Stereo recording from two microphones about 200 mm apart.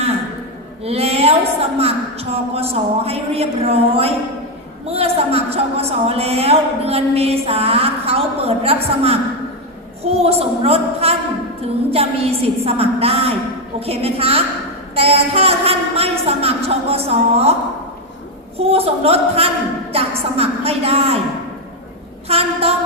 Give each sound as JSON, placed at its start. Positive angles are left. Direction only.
{"t": 0.9, "sound": "a woman's voice", "side_deg": -30}
{"t": 18.5, "sound": "a woman's voice", "side_deg": -30}
{"t": 22.3, "sound": "a woman's voice", "side_deg": -30}